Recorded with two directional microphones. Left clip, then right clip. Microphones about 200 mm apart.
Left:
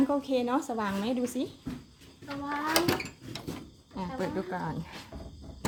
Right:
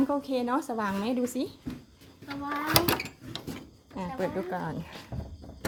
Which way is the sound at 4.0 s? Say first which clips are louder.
Right 2 dB; 15° right (ahead or behind).